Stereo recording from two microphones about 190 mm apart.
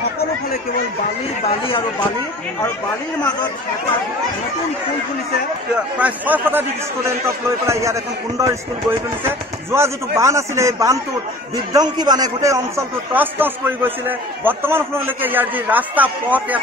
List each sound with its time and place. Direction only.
5.9 s a man's voice: 10° right (ahead or behind)
7.6 s a man's voice: 15° right (ahead or behind)